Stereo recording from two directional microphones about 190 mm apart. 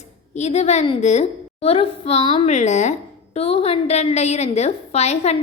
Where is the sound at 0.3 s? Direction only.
35° left (ahead or behind).